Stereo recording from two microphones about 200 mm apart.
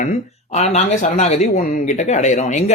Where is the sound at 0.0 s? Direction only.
35° left (ahead or behind).